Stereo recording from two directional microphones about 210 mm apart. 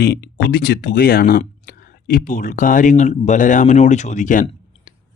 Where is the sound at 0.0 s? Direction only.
50° left (ahead or behind).